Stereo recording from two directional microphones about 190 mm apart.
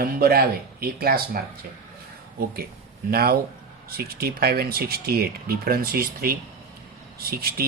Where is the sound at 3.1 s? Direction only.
50° right (ahead or behind).